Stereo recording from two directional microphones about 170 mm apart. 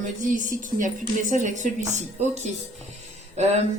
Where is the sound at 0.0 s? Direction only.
50° right (ahead or behind).